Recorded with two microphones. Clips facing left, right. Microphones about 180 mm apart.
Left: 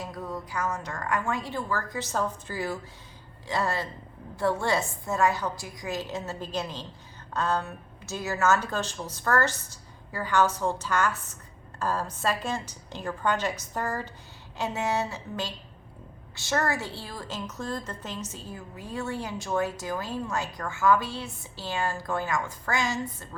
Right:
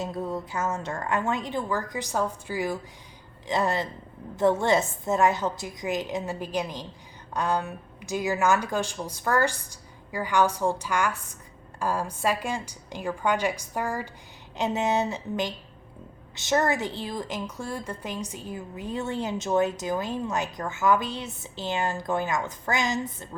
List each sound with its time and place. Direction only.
0.0 s a woman's voice: 25° right (ahead or behind)